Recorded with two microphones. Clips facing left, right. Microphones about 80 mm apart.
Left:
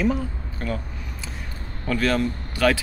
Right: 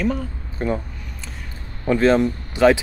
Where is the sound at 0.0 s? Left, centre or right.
Centre.